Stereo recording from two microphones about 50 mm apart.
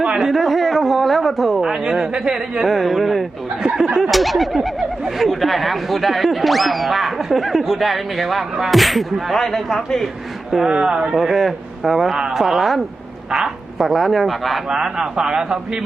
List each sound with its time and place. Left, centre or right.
0.2 s speech: centre
2.6 s a man's voice: centre
10.7 s a man's voice: centre
11.2 s a man's voice: centre